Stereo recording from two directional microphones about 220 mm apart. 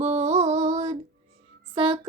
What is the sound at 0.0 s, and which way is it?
Music, 30° right (ahead or behind).